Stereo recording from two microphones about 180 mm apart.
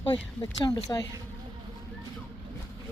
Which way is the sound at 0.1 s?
25° left (ahead or behind).